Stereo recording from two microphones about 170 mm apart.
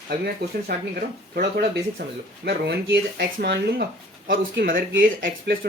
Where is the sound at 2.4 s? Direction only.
75° right (ahead or behind).